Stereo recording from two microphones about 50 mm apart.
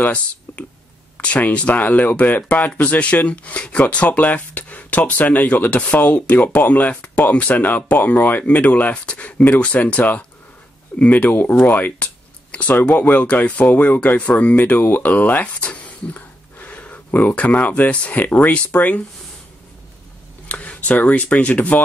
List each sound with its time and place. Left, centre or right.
0.0 s speech: left
20.4 s speech: left